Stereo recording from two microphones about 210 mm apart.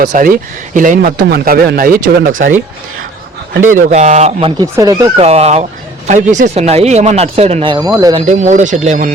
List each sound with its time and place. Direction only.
0.0 s speech: 40° right (ahead or behind)
3.5 s speech: 40° right (ahead or behind)
4.6 s speech: 15° right (ahead or behind)
5.1 s speech: 30° right (ahead or behind)
8.3 s speech: 35° right (ahead or behind)